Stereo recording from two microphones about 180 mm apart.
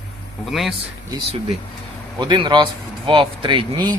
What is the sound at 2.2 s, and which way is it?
Speech, 25° right (ahead or behind).